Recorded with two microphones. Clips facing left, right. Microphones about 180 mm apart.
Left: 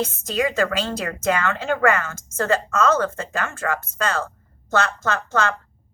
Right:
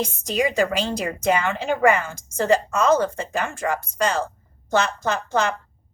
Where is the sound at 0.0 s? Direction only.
15° right (ahead or behind).